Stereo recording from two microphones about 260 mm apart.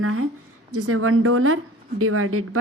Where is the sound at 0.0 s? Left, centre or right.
Right.